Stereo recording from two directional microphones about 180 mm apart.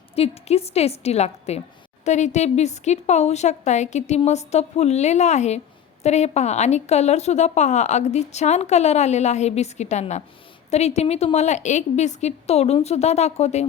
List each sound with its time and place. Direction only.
0.2 s a woman's voice: 35° left (ahead or behind)